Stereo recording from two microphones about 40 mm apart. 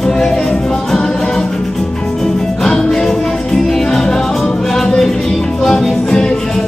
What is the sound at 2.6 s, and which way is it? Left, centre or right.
Music, centre.